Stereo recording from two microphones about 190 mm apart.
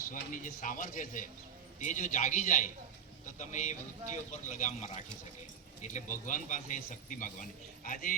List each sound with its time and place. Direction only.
0.1 s a man's voice: 45° left (ahead or behind)